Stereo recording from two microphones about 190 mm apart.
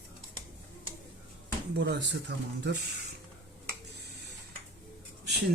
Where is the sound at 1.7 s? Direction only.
60° right (ahead or behind).